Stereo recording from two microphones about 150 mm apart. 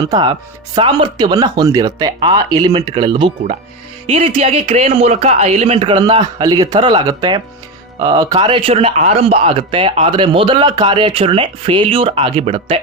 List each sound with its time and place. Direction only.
0.0 s speech: 30° right (ahead or behind)